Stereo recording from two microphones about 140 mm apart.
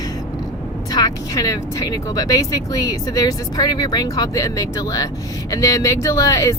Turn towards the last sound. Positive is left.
turn(degrees=20)  # may be behind; listen again after turning